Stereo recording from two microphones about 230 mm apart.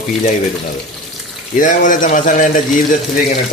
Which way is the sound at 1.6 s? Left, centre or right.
Left.